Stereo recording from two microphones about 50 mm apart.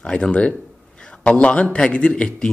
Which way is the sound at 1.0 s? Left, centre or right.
Left.